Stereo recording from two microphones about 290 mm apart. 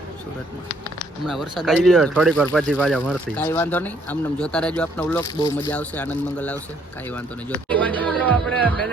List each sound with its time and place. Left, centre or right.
1.3 s speech: centre
7.7 s speech: centre